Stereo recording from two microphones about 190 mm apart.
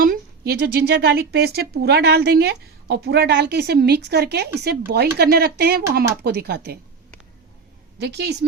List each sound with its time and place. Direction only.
0.0 s a woman's voice: 50° right (ahead or behind)
7.9 s a woman's voice: 60° right (ahead or behind)